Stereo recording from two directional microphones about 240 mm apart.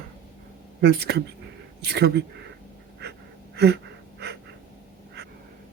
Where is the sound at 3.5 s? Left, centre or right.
Right.